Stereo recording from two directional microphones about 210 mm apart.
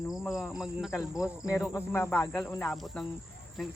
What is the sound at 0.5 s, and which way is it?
Cricket, centre (ahead or behind).